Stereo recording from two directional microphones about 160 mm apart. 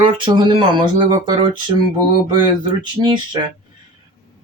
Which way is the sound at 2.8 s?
30° right (ahead or behind).